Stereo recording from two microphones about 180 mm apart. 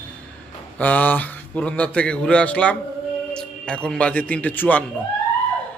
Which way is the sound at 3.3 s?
5° left (ahead or behind).